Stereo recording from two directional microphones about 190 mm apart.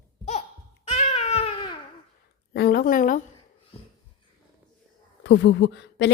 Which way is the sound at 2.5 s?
55° left (ahead or behind).